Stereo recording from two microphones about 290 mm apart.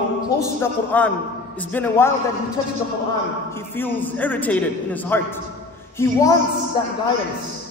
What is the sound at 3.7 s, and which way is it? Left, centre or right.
A man's voice, centre.